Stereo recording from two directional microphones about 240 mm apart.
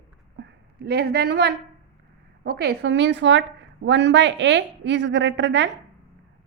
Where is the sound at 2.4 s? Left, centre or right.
Right.